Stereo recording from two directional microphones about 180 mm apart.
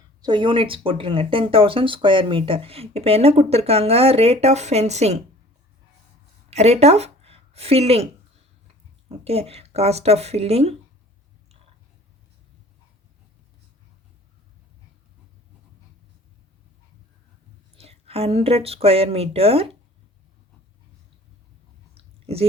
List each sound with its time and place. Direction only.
0.2 s speech: 25° right (ahead or behind)
6.5 s speech: 35° right (ahead or behind)
17.7 s speech: 35° right (ahead or behind)
21.9 s chewing: 35° right (ahead or behind)